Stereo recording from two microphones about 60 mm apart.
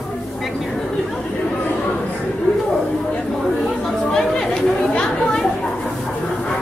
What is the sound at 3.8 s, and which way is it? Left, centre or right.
Chatter, centre.